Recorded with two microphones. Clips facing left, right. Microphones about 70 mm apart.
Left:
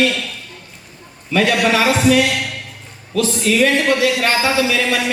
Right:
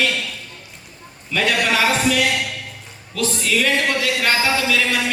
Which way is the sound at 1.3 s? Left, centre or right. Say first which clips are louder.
Left 4 dB; left.